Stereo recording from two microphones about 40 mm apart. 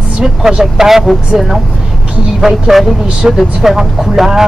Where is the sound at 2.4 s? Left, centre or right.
Centre.